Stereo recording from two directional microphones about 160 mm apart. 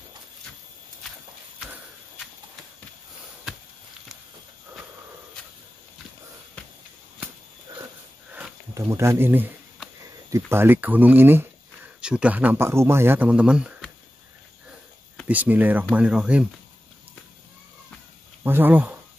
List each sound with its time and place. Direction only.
8.3 s sniff: 10° right (ahead or behind)
10.3 s speech: 15° right (ahead or behind)
15.2 s speech: 10° right (ahead or behind)
18.4 s speech: 15° right (ahead or behind)